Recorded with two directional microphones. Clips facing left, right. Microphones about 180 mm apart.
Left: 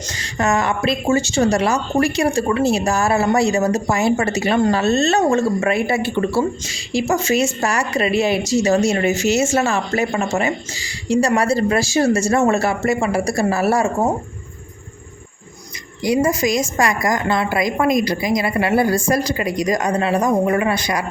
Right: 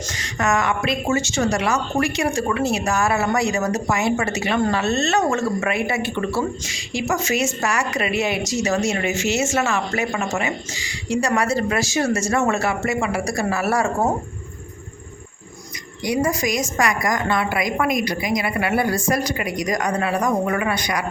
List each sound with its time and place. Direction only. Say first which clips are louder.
0.2 s a woman's voice: left 2 dB; 30° left (ahead or behind)
16.0 s a woman's voice: left 4 dB; 25° left (ahead or behind)